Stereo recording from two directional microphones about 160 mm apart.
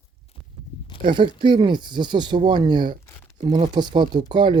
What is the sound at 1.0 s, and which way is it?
Speech, 30° right (ahead or behind).